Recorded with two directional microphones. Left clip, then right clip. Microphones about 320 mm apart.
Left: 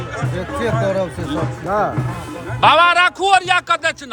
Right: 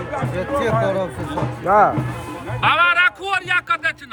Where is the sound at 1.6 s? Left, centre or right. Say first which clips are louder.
Right 5 dB; centre.